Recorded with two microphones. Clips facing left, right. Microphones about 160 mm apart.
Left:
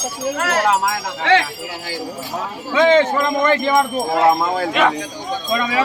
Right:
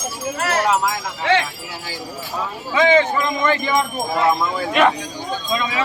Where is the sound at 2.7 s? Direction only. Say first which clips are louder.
Left 2 dB; 60° left (ahead or behind).